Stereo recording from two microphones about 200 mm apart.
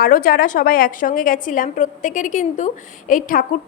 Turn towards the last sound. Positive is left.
turn(degrees=45)  # may be behind; listen again after turning